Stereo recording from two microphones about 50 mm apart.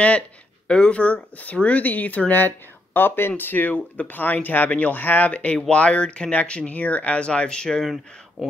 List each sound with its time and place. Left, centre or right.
0.7 s speech: left
5.3 s speech: left
7.8 s speech: centre